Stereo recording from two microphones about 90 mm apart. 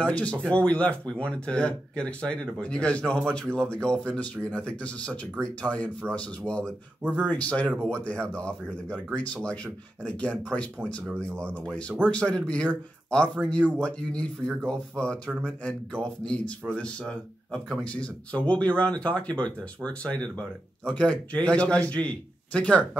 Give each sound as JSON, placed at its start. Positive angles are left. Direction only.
{"t": 0.0, "sound": "speech", "side_deg": 15}